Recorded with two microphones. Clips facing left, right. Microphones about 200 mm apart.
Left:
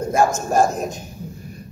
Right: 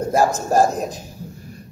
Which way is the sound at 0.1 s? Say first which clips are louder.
Right 1 dB; 35° right (ahead or behind).